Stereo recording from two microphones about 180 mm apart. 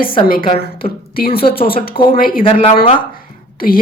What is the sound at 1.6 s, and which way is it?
Speech, 30° left (ahead or behind).